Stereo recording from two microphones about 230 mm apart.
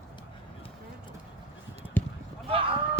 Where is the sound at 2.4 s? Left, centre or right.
Right.